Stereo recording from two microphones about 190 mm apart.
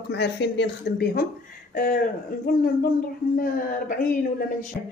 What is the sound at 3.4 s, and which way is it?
Speech, 45° left (ahead or behind).